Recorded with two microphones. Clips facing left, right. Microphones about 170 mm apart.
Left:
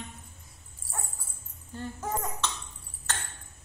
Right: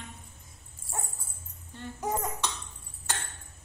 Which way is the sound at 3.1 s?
10° right (ahead or behind).